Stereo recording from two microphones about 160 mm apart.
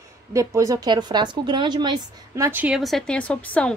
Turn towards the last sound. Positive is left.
turn(degrees=5)  # may be behind; listen again after turning